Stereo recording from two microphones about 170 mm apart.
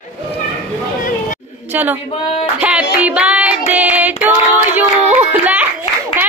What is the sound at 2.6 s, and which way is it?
Music, 5° right (ahead or behind).